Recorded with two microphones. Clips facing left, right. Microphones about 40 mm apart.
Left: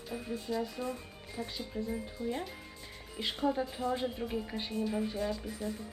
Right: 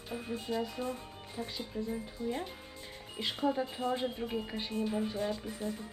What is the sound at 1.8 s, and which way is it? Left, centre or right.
Speech, centre.